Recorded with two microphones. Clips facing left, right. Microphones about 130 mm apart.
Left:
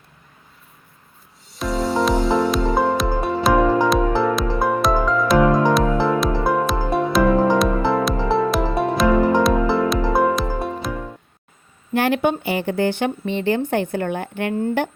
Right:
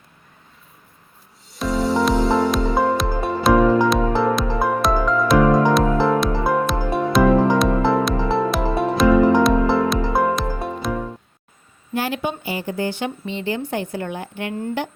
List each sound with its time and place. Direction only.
1.5 s music: centre (ahead or behind)
11.9 s speech: 60° left (ahead or behind)